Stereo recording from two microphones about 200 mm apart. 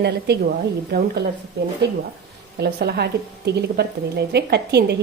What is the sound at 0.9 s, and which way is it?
A woman's voice, 50° right (ahead or behind).